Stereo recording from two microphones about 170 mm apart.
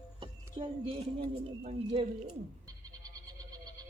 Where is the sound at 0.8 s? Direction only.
35° right (ahead or behind).